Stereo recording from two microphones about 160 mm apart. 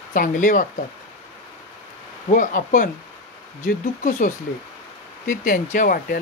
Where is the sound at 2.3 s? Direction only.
55° left (ahead or behind).